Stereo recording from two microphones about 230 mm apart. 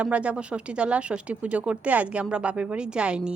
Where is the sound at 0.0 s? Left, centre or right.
Centre.